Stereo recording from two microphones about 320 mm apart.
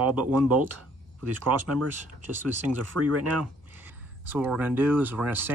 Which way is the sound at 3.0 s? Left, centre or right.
Right.